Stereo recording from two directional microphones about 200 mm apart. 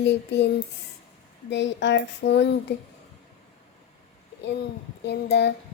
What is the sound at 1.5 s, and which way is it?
Speech, 65° left (ahead or behind).